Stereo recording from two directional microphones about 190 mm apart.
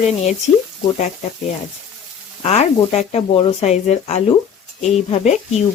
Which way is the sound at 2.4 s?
35° left (ahead or behind).